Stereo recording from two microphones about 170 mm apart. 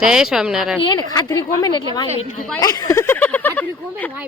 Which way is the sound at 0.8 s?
30° left (ahead or behind).